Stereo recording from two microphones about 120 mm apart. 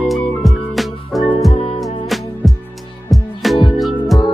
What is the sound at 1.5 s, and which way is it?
Music, 50° left (ahead or behind).